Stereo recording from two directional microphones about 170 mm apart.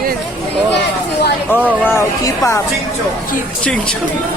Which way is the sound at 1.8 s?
15° left (ahead or behind).